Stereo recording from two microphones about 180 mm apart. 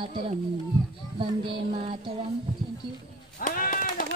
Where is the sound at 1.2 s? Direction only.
30° right (ahead or behind).